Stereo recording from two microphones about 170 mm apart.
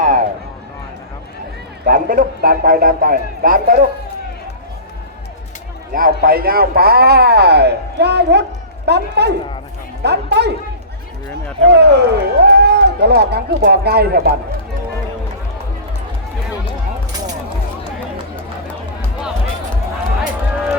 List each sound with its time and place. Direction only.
0.0 s a sound: 50° right (ahead or behind)
1.8 s a man's voice: 55° right (ahead or behind)
5.9 s speech: 60° right (ahead or behind); by 10.5 s 75° right (ahead or behind)
11.7 s speech: 80° right